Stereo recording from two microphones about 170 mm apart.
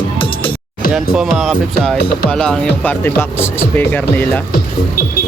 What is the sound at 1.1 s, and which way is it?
Speech, 5° right (ahead or behind).